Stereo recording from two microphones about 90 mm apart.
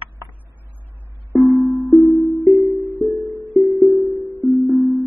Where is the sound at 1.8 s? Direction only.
45° left (ahead or behind).